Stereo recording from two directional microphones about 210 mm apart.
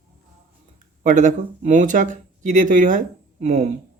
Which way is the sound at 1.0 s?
35° right (ahead or behind).